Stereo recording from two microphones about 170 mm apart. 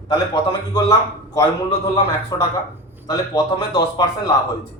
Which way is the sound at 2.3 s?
20° left (ahead or behind).